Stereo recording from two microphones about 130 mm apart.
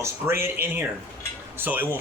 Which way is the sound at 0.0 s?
20° right (ahead or behind).